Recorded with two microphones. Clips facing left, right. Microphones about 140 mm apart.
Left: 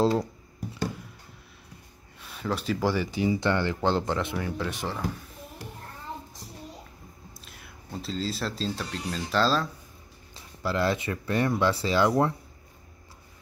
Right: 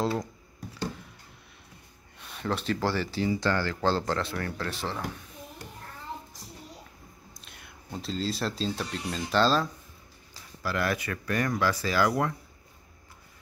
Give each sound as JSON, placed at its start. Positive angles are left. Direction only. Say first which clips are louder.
{"t": 2.1, "sound": "speech", "louder": "left 1 dB", "side_deg": 0}
{"t": 7.4, "sound": "speech", "louder": "right 1 dB", "side_deg": 0}
{"t": 10.3, "sound": "speech", "louder": "left 3 dB", "side_deg": 25}